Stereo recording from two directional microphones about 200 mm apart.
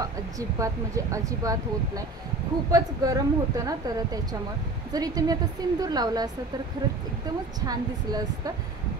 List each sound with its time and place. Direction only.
0.0 s a woman's voice: 15° right (ahead or behind)
7.6 s a woman's voice: 20° right (ahead or behind)